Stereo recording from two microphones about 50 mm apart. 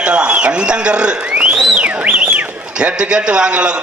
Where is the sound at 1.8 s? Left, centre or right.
Right.